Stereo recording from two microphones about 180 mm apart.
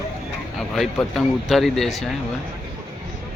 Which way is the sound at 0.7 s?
Centre (ahead or behind).